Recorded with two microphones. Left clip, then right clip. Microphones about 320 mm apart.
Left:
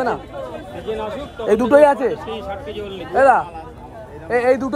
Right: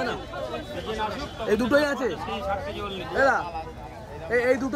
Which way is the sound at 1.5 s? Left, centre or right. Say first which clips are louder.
Left 8 dB; left.